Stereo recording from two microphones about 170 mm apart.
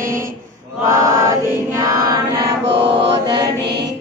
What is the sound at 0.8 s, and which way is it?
Chant, 20° right (ahead or behind).